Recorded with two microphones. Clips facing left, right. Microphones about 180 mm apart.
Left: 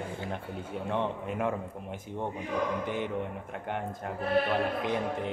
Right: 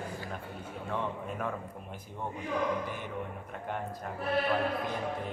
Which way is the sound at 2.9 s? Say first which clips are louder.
Left 6 dB; 75° left (ahead or behind).